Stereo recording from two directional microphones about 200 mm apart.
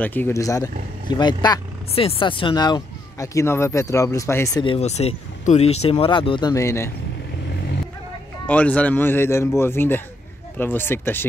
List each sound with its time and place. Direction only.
0.0 s speech: 10° left (ahead or behind)
4.6 s speech: 35° left (ahead or behind); by 6.9 s 15° left (ahead or behind)
8.5 s speech: 5° left (ahead or behind)